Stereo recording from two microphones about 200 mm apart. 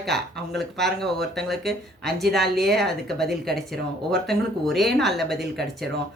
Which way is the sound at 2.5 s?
55° right (ahead or behind).